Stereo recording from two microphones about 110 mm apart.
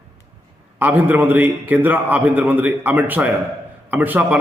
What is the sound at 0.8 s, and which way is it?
A man's voice, 15° right (ahead or behind).